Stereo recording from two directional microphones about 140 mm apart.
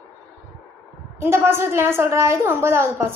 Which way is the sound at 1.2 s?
15° right (ahead or behind).